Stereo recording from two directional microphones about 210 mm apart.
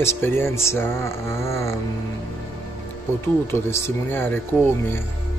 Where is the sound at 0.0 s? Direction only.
10° left (ahead or behind).